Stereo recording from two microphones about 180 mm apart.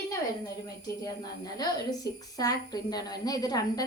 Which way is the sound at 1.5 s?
20° left (ahead or behind).